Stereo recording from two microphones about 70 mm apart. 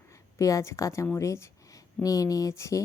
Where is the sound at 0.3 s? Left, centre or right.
Left.